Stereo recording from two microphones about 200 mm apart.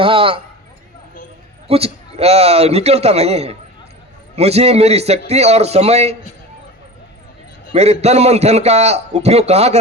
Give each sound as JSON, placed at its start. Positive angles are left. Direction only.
{"t": 0.0, "sound": "a man's voice", "side_deg": -25}
{"t": 1.6, "sound": "a man's voice", "side_deg": -30}
{"t": 7.7, "sound": "a man's voice", "side_deg": -30}